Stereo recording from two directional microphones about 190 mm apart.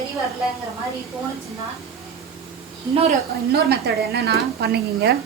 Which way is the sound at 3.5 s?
55° right (ahead or behind).